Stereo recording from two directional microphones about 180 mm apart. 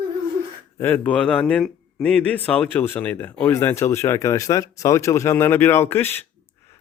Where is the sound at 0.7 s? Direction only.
10° left (ahead or behind).